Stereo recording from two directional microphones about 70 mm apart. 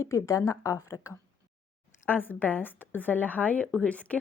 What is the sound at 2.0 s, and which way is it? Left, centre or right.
A woman's voice, left.